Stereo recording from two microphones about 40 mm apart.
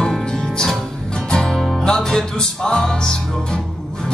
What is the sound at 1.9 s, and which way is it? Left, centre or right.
Music, centre.